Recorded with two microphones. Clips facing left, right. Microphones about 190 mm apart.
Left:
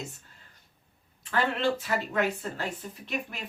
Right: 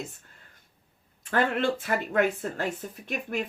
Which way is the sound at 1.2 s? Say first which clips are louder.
Right 2 dB; 50° right (ahead or behind).